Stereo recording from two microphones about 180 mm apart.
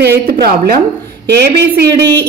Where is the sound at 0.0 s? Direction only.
65° right (ahead or behind).